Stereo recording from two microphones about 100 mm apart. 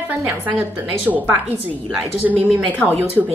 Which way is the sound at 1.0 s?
15° right (ahead or behind).